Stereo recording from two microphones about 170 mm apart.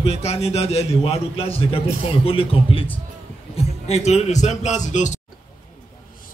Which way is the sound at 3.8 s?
40° left (ahead or behind).